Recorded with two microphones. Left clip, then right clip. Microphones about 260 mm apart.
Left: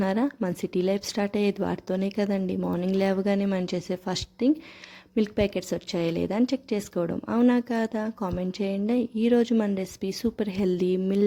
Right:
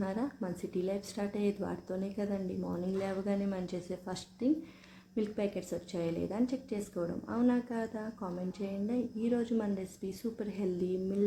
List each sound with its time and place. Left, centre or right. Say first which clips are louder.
0.0 s a woman's voice: left 10 dB; left